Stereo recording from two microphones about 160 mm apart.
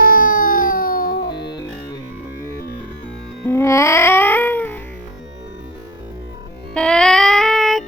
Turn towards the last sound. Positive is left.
turn(degrees=0)  # may be behind; listen again after turning